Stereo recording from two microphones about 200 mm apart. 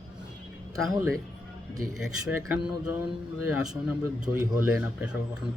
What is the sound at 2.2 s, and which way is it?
A man's voice, 5° right (ahead or behind).